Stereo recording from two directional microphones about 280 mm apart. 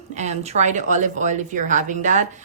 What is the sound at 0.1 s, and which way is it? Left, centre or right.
A woman's voice, right.